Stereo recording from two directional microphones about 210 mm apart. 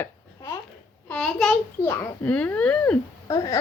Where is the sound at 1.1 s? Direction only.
5° left (ahead or behind).